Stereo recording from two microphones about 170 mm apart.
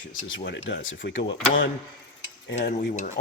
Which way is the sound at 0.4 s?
90° left.